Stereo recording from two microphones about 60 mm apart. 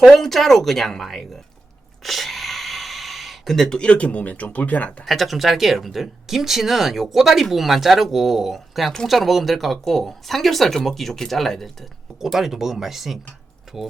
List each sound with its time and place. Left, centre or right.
0.1 s speech: centre
2.0 s gasp: centre
3.8 s speech: left
5.0 s speech: centre